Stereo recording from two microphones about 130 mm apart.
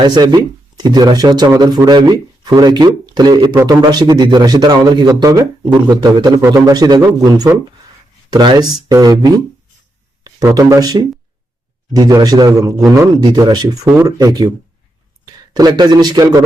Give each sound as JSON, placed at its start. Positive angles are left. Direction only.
{"t": 0.0, "sound": "a man's voice", "side_deg": -35}
{"t": 10.2, "sound": "a man's voice", "side_deg": -30}